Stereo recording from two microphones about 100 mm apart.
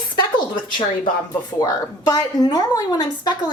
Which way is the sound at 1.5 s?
40° left (ahead or behind).